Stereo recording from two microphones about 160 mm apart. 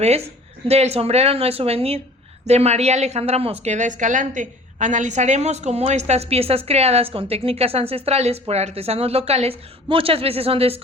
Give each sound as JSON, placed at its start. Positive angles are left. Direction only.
{"t": 0.0, "sound": "a woman's voice", "side_deg": -40}